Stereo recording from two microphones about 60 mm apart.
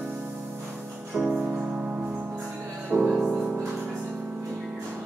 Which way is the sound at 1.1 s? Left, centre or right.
Centre.